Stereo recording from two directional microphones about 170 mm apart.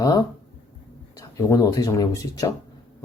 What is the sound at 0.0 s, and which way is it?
Speech, 25° left (ahead or behind).